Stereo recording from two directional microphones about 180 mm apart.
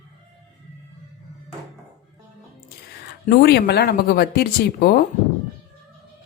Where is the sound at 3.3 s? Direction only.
65° left (ahead or behind).